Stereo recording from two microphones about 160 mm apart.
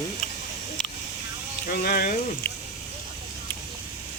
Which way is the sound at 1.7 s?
65° left (ahead or behind).